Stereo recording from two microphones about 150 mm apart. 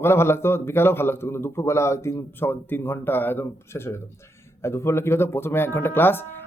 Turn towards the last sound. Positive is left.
turn(degrees=15)  # may be behind; listen again after turning